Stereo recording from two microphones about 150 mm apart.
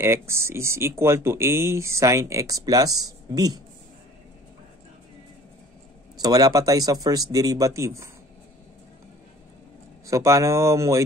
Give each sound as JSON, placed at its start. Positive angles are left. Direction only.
{"t": 0.0, "sound": "speech", "side_deg": -15}
{"t": 6.2, "sound": "speech", "side_deg": -25}
{"t": 10.0, "sound": "speech", "side_deg": -20}